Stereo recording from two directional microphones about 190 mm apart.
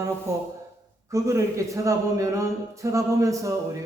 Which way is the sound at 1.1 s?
15° right (ahead or behind).